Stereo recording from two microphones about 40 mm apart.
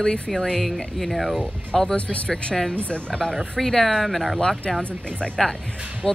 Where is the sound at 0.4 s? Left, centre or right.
Centre.